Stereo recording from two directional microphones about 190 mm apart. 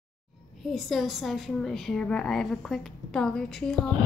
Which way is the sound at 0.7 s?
Centre (ahead or behind).